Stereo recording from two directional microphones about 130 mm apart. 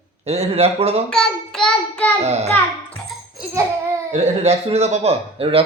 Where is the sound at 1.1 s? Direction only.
5° left (ahead or behind).